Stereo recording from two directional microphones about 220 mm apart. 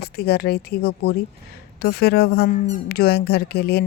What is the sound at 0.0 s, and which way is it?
Speech, 45° left (ahead or behind).